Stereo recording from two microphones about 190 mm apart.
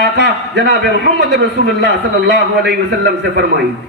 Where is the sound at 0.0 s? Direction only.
60° right (ahead or behind).